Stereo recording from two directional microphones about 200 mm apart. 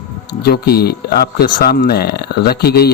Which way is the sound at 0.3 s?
50° left (ahead or behind).